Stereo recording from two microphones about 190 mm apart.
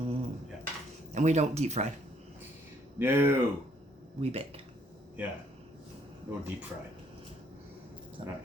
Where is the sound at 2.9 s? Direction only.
10° right (ahead or behind).